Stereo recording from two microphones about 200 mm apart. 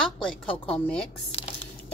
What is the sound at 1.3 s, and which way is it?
Speech, 30° left (ahead or behind).